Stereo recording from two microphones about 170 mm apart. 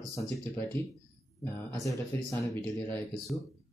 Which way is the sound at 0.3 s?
20° left (ahead or behind).